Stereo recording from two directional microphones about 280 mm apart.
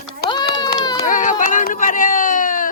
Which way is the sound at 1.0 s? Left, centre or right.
Left.